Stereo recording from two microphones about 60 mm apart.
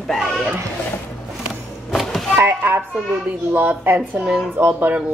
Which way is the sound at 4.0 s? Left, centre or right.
Centre.